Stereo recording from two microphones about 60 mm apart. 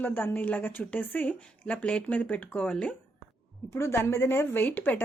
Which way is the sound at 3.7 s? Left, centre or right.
Left.